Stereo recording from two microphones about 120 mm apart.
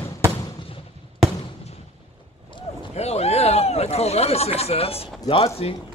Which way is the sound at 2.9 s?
60° left (ahead or behind).